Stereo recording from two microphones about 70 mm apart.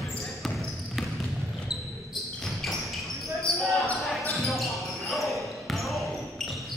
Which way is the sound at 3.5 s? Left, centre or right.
Centre.